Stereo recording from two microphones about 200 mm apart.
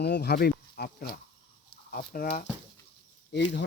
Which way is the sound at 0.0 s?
55° left (ahead or behind).